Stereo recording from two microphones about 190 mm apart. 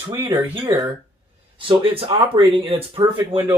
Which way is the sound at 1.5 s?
30° right (ahead or behind).